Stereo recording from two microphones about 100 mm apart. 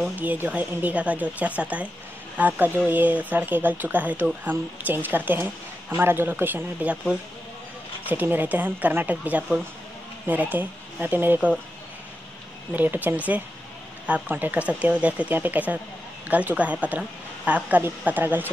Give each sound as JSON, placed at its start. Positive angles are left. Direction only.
{"t": 0.0, "sound": "speech", "side_deg": -15}
{"t": 12.7, "sound": "speech", "side_deg": -20}